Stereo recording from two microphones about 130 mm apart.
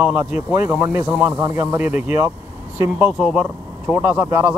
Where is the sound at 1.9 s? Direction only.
65° left (ahead or behind).